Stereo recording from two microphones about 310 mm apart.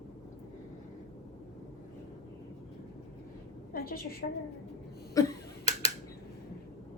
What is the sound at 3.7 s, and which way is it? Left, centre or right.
Speech, left.